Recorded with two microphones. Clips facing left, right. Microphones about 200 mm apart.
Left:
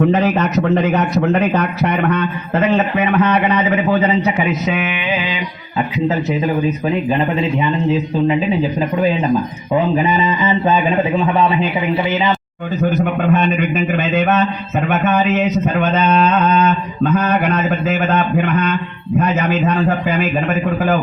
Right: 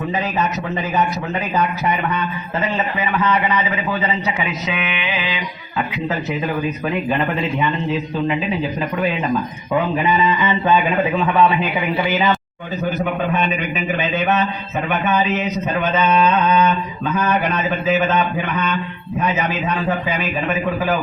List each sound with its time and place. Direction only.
0.0 s a man's voice: 70° left (ahead or behind)
6.8 s a man's voice: 25° left (ahead or behind)
9.7 s a man's voice: 30° left (ahead or behind)
17.8 s a man's voice: 50° left (ahead or behind)